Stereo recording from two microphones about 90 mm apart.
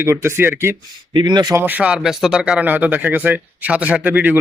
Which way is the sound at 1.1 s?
50° right (ahead or behind).